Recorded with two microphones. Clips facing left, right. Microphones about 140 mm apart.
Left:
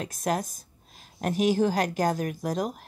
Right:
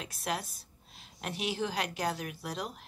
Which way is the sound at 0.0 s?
45° left (ahead or behind).